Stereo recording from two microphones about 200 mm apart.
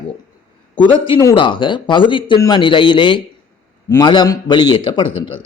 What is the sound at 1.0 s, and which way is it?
A man's voice, 20° left (ahead or behind).